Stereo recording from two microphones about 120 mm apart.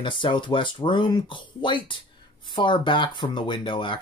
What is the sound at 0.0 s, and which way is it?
Speech, 40° left (ahead or behind).